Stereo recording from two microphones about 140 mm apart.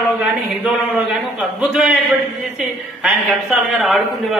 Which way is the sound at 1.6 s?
5° right (ahead or behind).